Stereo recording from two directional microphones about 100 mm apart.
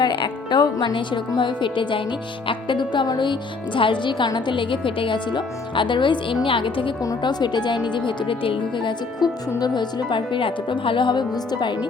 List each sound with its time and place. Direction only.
0.0 s speech: 55° left (ahead or behind)
7.2 s speech: 45° left (ahead or behind)
9.2 s speech: 45° left (ahead or behind)